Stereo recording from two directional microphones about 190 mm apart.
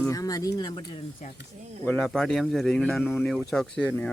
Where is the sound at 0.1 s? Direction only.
20° left (ahead or behind).